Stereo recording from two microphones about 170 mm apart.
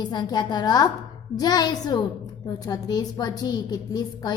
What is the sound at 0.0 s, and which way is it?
A woman's voice, 25° left (ahead or behind).